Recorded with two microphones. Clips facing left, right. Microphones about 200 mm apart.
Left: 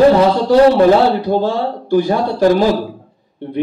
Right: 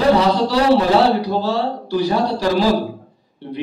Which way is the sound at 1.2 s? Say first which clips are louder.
Left 4 dB; 50° left (ahead or behind).